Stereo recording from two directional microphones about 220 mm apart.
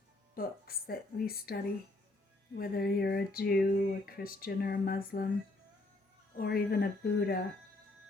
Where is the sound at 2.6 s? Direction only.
45° left (ahead or behind).